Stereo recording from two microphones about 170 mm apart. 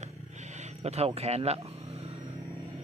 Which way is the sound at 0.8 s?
40° right (ahead or behind).